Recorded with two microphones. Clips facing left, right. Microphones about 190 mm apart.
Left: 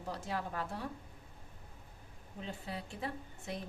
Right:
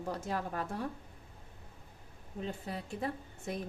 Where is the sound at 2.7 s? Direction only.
45° right (ahead or behind).